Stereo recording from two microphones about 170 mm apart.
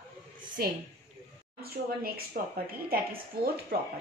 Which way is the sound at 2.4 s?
60° right (ahead or behind).